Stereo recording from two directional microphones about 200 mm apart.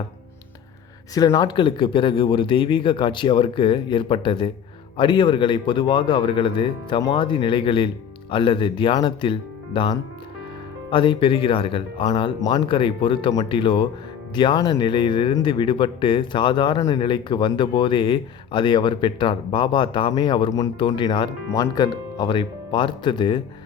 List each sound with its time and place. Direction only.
1.1 s speech: 20° left (ahead or behind)